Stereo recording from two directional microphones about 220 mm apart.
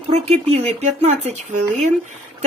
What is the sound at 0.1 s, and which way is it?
Speech, 30° right (ahead or behind).